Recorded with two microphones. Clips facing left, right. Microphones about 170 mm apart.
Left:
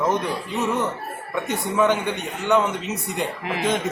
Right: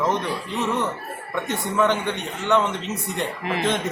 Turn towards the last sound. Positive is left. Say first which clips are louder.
# even
turn(degrees=5)  # may be behind; listen again after turning